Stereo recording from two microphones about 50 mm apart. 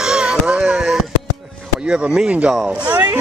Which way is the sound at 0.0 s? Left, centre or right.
Centre.